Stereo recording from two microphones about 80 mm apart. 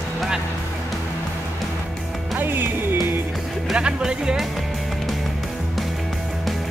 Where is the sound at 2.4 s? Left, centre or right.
Right.